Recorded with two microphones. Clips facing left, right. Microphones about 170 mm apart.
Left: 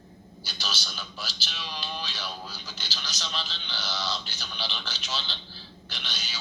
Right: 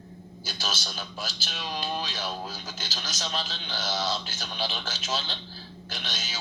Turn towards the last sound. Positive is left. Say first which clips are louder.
# right 3 dB
turn(degrees=-50)  # may be behind; listen again after turning